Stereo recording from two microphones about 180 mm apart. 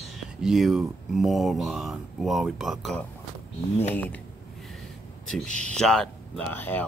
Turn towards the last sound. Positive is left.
turn(degrees=10)  # may be behind; listen again after turning